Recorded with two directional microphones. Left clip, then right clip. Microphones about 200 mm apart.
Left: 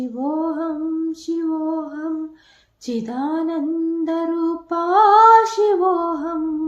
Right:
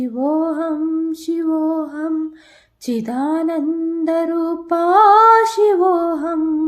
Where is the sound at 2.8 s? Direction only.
40° right (ahead or behind).